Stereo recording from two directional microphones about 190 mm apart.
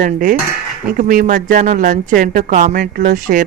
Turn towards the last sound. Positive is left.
turn(degrees=-40)  # may be behind; listen again after turning